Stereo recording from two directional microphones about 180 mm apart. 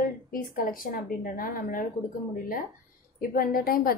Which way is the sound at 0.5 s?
55° left (ahead or behind).